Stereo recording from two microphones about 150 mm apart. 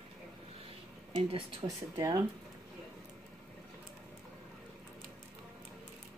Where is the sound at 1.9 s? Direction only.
20° right (ahead or behind).